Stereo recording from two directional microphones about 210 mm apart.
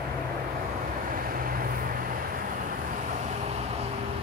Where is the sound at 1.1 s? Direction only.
45° right (ahead or behind).